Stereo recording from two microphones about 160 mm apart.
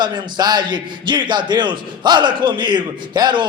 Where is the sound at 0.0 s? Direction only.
25° right (ahead or behind).